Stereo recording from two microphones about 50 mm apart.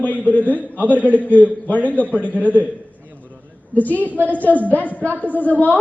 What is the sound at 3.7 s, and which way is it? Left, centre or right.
A woman's voice, left.